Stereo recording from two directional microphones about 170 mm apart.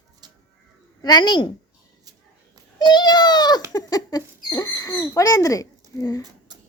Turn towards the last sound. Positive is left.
turn(degrees=20)  # may be behind; listen again after turning